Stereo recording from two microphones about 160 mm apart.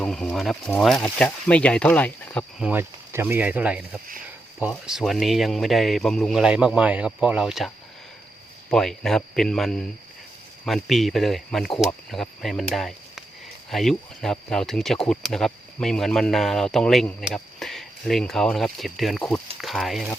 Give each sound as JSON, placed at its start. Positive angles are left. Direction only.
{"t": 0.0, "sound": "speech", "side_deg": 5}
{"t": 2.6, "sound": "speech", "side_deg": -10}
{"t": 8.7, "sound": "speech", "side_deg": 5}